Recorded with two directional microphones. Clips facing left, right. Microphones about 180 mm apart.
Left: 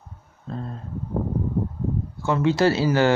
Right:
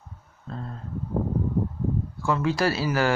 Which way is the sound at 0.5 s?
20° left (ahead or behind).